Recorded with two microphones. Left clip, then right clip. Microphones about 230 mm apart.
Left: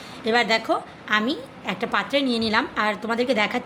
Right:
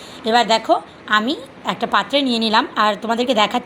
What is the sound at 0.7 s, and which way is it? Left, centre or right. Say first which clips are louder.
A woman's voice: right 6 dB; centre.